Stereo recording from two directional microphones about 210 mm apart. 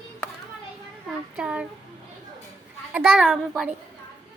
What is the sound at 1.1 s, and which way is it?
Child singing, 5° right (ahead or behind).